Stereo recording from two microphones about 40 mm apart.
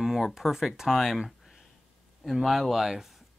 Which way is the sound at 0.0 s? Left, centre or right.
Centre.